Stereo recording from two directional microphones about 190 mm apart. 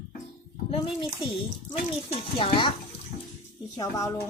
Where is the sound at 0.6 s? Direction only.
30° left (ahead or behind).